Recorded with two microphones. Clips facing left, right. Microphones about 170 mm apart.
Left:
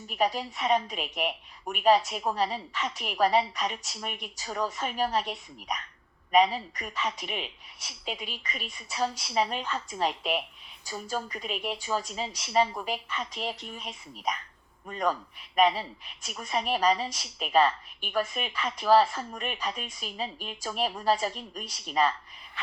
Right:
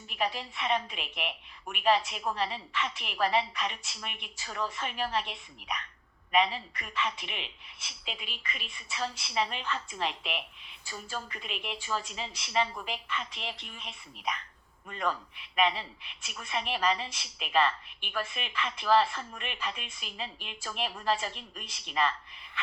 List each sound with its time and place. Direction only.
0.1 s a woman's voice: 40° left (ahead or behind)